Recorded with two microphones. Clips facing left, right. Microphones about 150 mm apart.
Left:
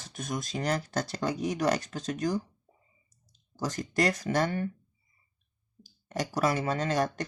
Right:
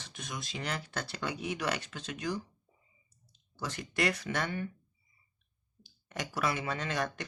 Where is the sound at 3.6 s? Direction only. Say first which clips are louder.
Left 5 dB; 40° left (ahead or behind).